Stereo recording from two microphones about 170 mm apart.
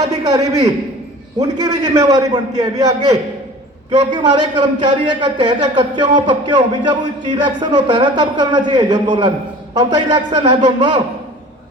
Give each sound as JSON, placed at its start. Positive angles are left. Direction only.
{"t": 0.0, "sound": "a man's voice", "side_deg": -20}